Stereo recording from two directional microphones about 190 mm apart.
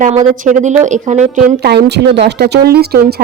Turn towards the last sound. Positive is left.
turn(degrees=-55)  # may be behind; listen again after turning